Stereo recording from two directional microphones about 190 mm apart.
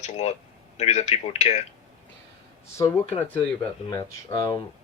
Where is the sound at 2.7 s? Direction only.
15° left (ahead or behind).